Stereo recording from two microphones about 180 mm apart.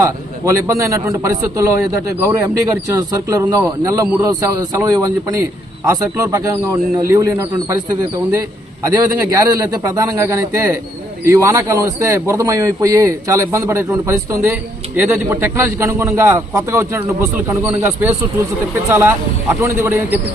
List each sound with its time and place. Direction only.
0.0 s a man's voice: 15° right (ahead or behind)
8.8 s a man's voice: 20° right (ahead or behind)